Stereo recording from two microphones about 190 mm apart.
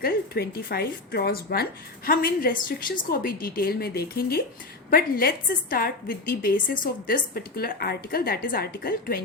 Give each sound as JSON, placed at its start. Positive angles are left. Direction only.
{"t": 0.0, "sound": "a woman's voice", "side_deg": 55}